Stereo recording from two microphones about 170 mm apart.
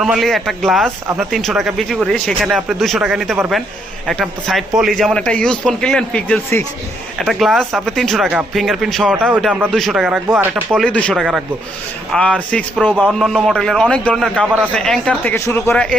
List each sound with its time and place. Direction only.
0.0 s a man's voice: centre (ahead or behind)
1.0 s speech: 15° right (ahead or behind)
1.3 s a man's voice: centre (ahead or behind)
7.3 s a man's voice: centre (ahead or behind)
10.2 s speech: 15° right (ahead or behind)
10.7 s a man's voice: 5° left (ahead or behind)
12.7 s a man's voice: 5° right (ahead or behind); by 15.7 s 15° left (ahead or behind)
15.7 s a man's voice: 5° left (ahead or behind)